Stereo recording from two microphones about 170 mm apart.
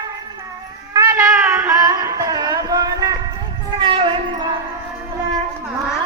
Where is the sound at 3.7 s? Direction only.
30° right (ahead or behind).